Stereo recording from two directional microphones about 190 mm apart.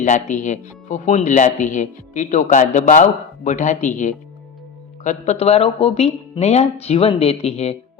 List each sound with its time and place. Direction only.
0.0 s speech: 40° left (ahead or behind)